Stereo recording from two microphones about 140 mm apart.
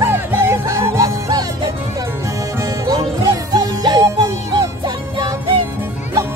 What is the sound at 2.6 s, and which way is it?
Music, 25° right (ahead or behind).